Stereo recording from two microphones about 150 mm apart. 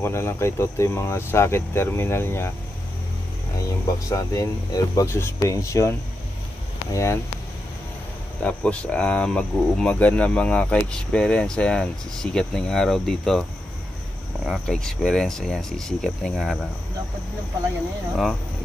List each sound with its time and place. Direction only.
0.0 s speech: 15° left (ahead or behind)
3.8 s speech: 20° left (ahead or behind)
8.4 s speech: 10° left (ahead or behind)